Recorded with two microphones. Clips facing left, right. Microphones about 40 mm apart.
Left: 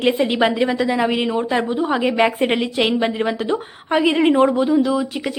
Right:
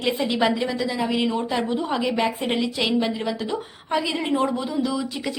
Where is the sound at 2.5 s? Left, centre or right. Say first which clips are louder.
Left 4 dB; left.